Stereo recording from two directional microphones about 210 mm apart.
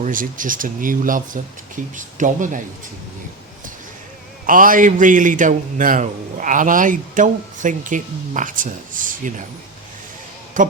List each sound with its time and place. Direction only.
0.0 s a man's voice: 40° right (ahead or behind)
4.4 s a man's voice: 40° right (ahead or behind)
10.6 s a man's voice: 40° right (ahead or behind)